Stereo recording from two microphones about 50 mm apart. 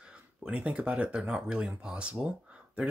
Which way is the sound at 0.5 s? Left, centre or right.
Right.